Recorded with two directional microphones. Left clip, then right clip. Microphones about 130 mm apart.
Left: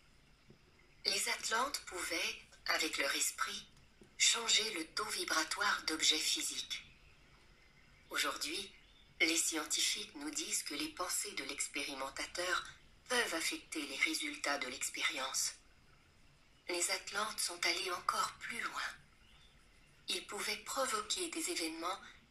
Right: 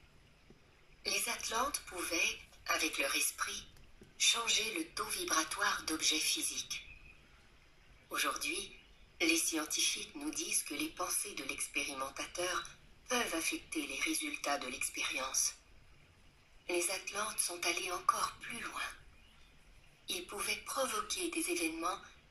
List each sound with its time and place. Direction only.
1.0 s a sound: 40° left (ahead or behind)
1.6 s speech: 35° left (ahead or behind)
4.3 s speech: 35° left (ahead or behind)
8.1 s speech: 35° left (ahead or behind)
16.6 s speech: 35° left (ahead or behind)
20.2 s speech: 35° left (ahead or behind)